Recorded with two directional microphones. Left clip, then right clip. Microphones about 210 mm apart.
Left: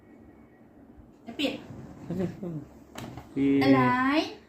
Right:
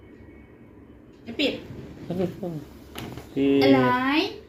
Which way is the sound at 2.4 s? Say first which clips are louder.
Right 5 dB; 20° left (ahead or behind).